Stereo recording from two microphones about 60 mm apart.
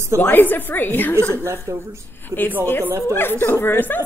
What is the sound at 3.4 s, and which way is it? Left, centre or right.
Speech, left.